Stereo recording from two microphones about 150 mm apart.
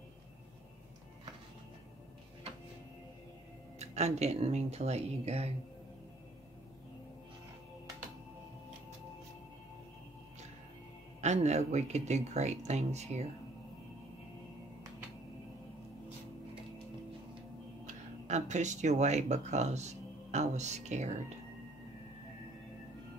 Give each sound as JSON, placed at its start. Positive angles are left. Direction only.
{"t": 3.8, "sound": "speech", "side_deg": -45}
{"t": 11.1, "sound": "speech", "side_deg": -50}
{"t": 18.2, "sound": "speech", "side_deg": -50}